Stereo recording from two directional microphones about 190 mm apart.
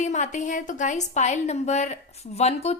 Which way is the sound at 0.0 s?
40° left (ahead or behind).